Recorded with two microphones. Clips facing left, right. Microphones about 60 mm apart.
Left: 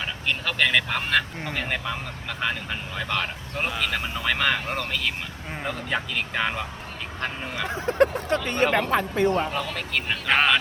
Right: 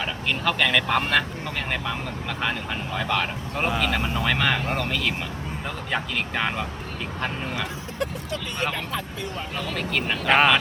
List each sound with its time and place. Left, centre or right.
0.0 s speech: centre
7.9 s speech: left
9.6 s speech: centre